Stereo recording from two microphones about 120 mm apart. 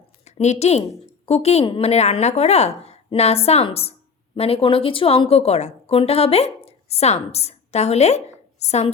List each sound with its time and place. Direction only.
0.3 s a woman's voice: 70° left (ahead or behind)